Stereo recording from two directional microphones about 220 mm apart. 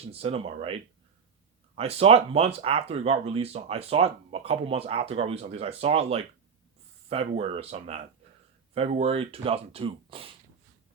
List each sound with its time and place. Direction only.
0.0 s speech: 25° right (ahead or behind)